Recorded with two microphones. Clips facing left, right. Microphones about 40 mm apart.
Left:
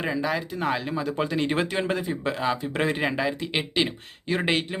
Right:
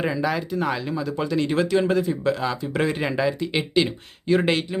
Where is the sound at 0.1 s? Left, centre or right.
Centre.